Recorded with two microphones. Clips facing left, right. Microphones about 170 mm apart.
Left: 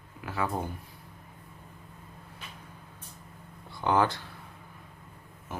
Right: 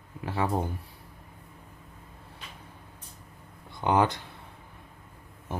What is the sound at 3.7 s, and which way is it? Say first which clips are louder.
Speech: right 1 dB; 20° right (ahead or behind).